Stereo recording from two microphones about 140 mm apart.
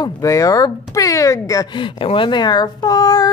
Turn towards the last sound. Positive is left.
turn(degrees=25)  # may be behind; listen again after turning